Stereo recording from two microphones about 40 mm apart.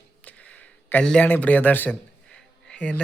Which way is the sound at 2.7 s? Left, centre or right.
Left.